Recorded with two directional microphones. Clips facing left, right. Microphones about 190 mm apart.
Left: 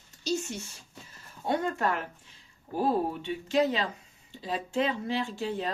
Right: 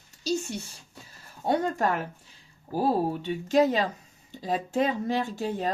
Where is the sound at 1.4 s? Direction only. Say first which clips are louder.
Right 3 dB; 40° right (ahead or behind).